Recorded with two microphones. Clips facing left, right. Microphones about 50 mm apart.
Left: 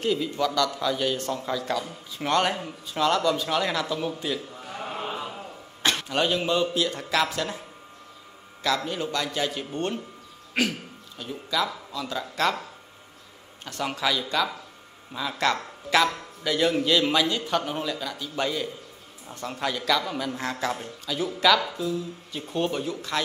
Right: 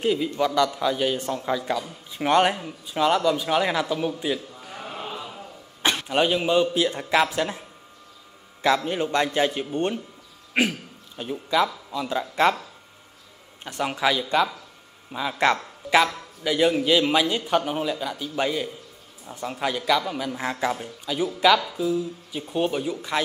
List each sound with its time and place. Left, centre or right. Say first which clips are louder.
0.0 s a man's voice: right 2 dB; centre
4.6 s chant: left 3 dB; centre
5.1 s a sound: left 2 dB; left
5.8 s a man's voice: right 3 dB; centre
8.6 s a man's voice: right 5 dB; right
13.7 s a man's voice: right 3 dB; centre